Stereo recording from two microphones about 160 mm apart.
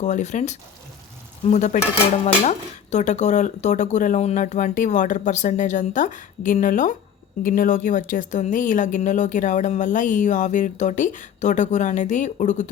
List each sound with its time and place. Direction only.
0.0 s speech: 50° left (ahead or behind)